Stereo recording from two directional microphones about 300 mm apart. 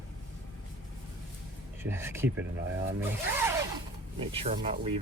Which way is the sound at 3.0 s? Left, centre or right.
Centre.